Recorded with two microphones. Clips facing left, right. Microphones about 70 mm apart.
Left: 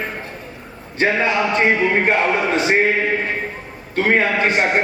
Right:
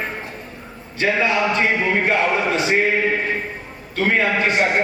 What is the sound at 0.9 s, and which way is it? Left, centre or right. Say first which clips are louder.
Speech: left 1 dB; left.